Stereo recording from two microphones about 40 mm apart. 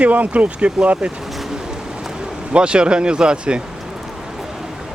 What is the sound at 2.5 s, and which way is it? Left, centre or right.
Speech, right.